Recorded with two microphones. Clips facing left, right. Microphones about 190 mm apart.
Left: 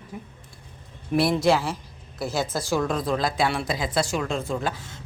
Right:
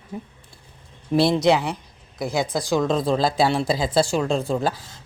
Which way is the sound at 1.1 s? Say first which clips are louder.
Right 3 dB; 25° right (ahead or behind).